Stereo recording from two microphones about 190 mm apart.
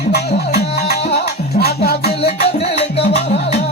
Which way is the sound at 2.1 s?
35° left (ahead or behind).